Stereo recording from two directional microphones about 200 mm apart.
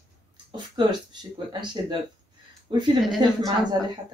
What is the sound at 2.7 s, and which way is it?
Speech, 25° right (ahead or behind).